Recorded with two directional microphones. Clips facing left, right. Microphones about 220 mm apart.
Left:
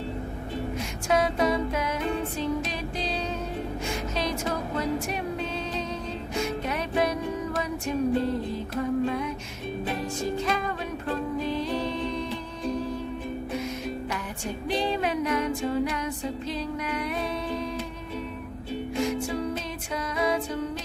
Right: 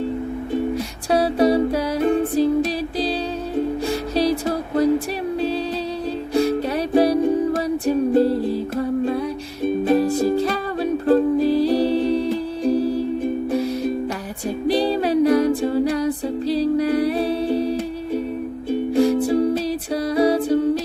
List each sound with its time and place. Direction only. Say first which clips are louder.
1.1 s music: right 7 dB; 35° right (ahead or behind)
3.8 s music: right 8 dB; 35° right (ahead or behind)
6.3 s music: right 10 dB; 35° right (ahead or behind)
14.7 s music: right 8 dB; 35° right (ahead or behind)